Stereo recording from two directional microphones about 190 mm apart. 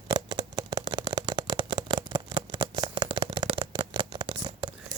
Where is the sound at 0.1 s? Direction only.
20° right (ahead or behind).